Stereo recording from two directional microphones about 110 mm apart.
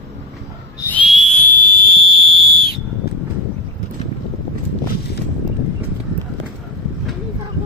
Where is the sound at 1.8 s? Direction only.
50° right (ahead or behind).